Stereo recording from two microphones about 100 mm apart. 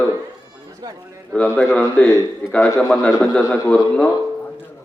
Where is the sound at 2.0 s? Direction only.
15° left (ahead or behind).